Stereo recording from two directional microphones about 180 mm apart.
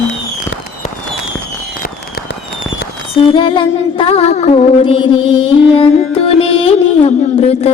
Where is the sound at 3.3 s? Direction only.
30° left (ahead or behind).